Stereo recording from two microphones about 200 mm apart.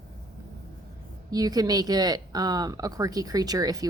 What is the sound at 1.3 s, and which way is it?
Speech, 20° right (ahead or behind).